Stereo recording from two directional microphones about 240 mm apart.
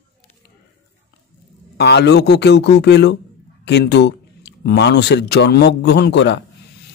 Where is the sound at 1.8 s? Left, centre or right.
Left.